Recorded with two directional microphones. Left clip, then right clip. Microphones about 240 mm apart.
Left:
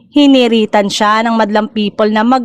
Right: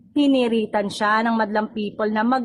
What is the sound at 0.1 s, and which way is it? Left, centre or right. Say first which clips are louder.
Speech: left 10 dB; left.